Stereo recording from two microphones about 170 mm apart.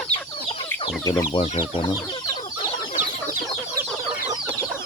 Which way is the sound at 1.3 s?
40° left (ahead or behind).